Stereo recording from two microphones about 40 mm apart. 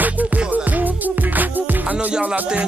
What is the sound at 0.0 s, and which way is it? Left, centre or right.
Music, right.